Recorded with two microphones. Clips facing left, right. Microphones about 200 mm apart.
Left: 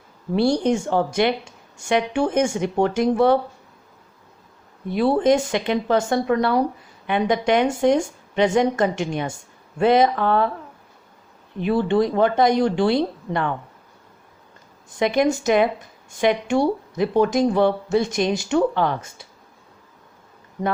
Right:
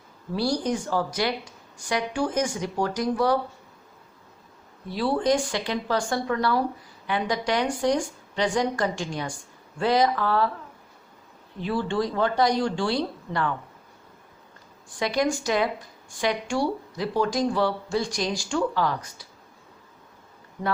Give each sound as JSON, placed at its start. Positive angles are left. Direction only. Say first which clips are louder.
{"t": 0.3, "sound": "speech", "louder": "left 7 dB", "side_deg": 25}
{"t": 4.9, "sound": "speech", "louder": "left 6 dB", "side_deg": 20}
{"t": 11.6, "sound": "speech", "louder": "left 7 dB", "side_deg": 20}
{"t": 14.9, "sound": "speech", "louder": "left 6 dB", "side_deg": 20}